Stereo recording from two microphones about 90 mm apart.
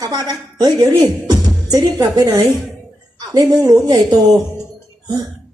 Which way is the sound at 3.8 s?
45° right (ahead or behind).